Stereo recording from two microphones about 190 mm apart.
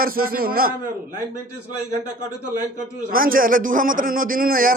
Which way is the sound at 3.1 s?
50° right (ahead or behind).